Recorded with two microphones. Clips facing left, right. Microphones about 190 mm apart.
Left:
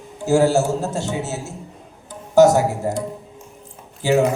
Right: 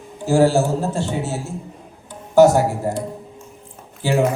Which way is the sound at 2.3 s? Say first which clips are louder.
Even; 45° left (ahead or behind).